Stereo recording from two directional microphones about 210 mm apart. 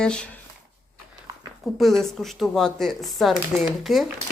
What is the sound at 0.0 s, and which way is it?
Speech, 5° left (ahead or behind).